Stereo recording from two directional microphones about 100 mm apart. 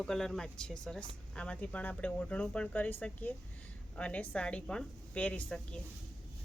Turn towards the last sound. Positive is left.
turn(degrees=10)  # may be behind; listen again after turning